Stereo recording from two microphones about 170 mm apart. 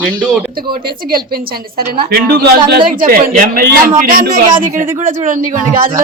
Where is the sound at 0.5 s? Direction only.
60° right (ahead or behind).